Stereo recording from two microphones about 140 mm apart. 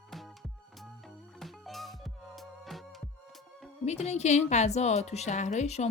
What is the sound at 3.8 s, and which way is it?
A woman's voice, 50° left (ahead or behind).